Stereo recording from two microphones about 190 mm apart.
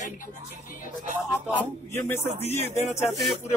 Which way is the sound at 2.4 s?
35° left (ahead or behind).